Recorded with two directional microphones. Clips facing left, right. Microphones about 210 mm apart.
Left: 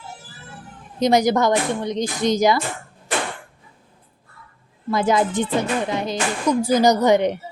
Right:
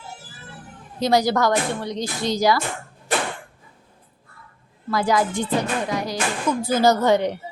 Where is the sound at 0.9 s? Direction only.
20° left (ahead or behind).